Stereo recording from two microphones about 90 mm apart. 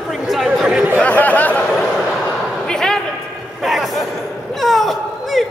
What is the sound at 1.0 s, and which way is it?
Speech, 15° left (ahead or behind).